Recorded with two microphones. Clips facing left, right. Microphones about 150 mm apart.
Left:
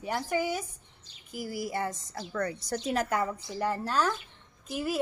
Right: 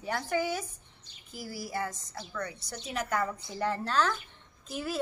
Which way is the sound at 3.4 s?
10° left (ahead or behind).